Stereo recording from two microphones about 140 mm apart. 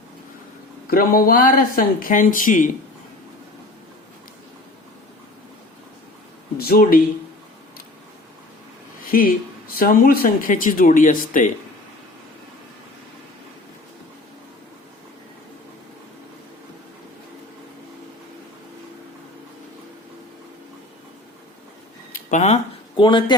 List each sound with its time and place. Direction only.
0.9 s speech: 90° left; by 2.6 s 70° left (ahead or behind)
6.6 s speech: 90° left
9.0 s speech: 90° left; by 11.5 s 65° left (ahead or behind)
22.1 s a sound: 60° left (ahead or behind)
23.0 s speech: 35° left (ahead or behind)